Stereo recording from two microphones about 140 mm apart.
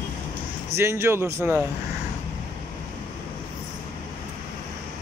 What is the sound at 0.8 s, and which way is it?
Speech, 20° right (ahead or behind).